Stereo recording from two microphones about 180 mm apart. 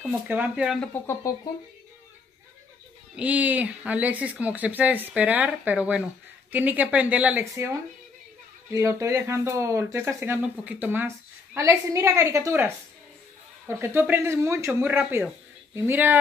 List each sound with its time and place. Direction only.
0.0 s speech: 10° right (ahead or behind)
0.7 s speech: 15° left (ahead or behind)
3.2 s speech: 10° right (ahead or behind)
8.7 s speech: 15° right (ahead or behind)